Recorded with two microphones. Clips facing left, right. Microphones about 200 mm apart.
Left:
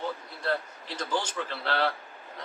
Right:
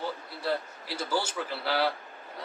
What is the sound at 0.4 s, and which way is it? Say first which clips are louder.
Speech: even; 10° right (ahead or behind).